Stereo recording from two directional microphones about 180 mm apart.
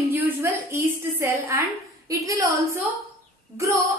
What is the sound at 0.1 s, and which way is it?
A woman's voice, 15° right (ahead or behind).